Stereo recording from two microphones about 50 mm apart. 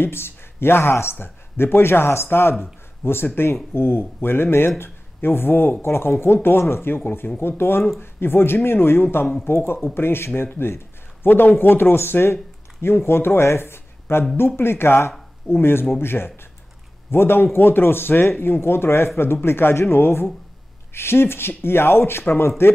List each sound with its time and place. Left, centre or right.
0.0 s speech: left